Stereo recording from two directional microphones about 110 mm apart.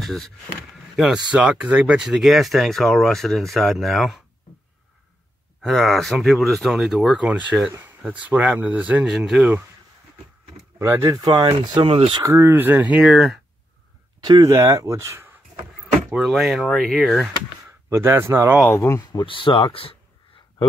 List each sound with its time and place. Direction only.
0.0 s speech: centre (ahead or behind)
5.6 s speech: centre (ahead or behind)
10.8 s speech: 25° right (ahead or behind); by 11.8 s 40° right (ahead or behind)
11.8 s speech: 60° right (ahead or behind)
12.2 s speech: 25° right (ahead or behind)
13.0 s speech: centre (ahead or behind)
14.2 s speech: 35° right (ahead or behind)
16.2 s speech: 5° right (ahead or behind)
16.7 s speech: 5° left (ahead or behind)
17.8 s speech: 25° right (ahead or behind)
18.6 s speech: 20° left (ahead or behind)
19.1 s speech: 50° left (ahead or behind)